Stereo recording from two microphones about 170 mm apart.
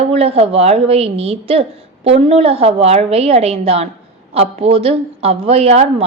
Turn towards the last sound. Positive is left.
turn(degrees=-40)  # may be behind; listen again after turning